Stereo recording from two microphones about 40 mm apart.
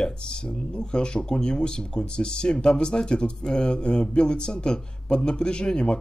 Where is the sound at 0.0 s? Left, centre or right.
Left.